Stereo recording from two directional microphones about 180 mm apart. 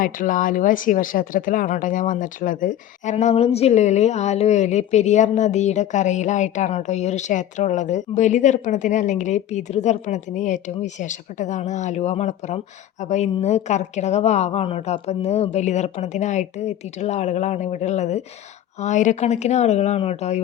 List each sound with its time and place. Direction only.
0.0 s speech: 50° left (ahead or behind)